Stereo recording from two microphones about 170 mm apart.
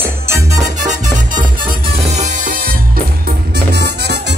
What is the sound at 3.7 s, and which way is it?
Music, 80° right.